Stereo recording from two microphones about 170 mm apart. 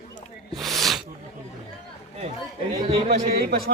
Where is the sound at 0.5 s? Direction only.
Centre (ahead or behind).